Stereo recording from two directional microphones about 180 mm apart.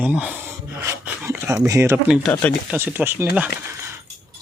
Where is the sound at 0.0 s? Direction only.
5° right (ahead or behind).